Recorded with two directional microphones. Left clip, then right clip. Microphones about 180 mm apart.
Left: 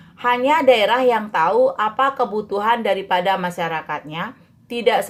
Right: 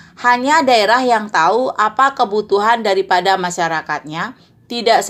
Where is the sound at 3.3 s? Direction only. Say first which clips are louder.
Right 5 dB; 25° right (ahead or behind).